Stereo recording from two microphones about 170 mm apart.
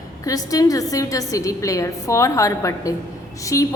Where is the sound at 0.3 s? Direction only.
20° left (ahead or behind).